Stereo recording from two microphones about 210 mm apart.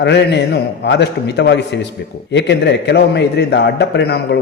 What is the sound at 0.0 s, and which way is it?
A man's voice, 55° left (ahead or behind).